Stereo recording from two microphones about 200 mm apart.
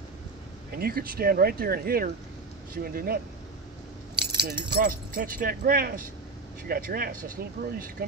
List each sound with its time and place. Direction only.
0.7 s speech: 50° right (ahead or behind)
4.1 s keys jangling: 55° right (ahead or behind)
4.6 s speech: 50° right (ahead or behind)